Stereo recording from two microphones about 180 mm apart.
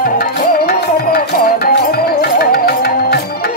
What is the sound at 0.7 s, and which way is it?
Music, 60° left (ahead or behind).